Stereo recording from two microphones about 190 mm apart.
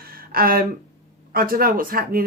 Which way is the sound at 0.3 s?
50° right (ahead or behind).